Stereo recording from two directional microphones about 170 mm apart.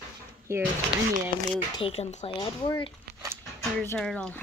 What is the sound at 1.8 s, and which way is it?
Speech, 35° left (ahead or behind).